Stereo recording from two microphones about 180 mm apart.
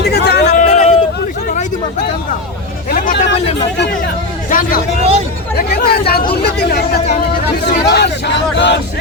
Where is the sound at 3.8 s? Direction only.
65° left (ahead or behind).